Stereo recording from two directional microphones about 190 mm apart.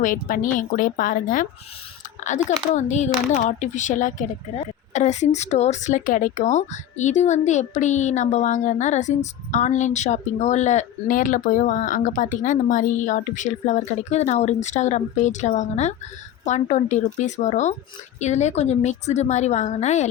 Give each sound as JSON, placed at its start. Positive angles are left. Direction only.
{"t": 0.0, "sound": "a woman's voice", "side_deg": 45}
{"t": 2.7, "sound": "a woman's voice", "side_deg": 40}